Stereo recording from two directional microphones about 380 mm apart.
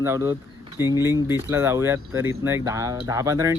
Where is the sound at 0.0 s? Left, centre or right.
Centre.